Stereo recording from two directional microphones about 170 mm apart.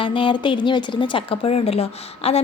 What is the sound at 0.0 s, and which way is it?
A woman's voice, 30° left (ahead or behind).